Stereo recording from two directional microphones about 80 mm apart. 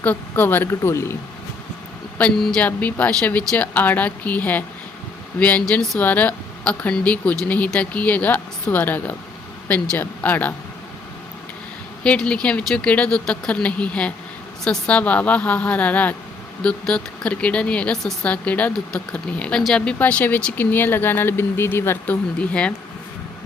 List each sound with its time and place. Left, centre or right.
0.0 s speech: left
0.7 s speech: left
2.4 s speech: centre
2.6 s speech: centre
12.0 s speech: centre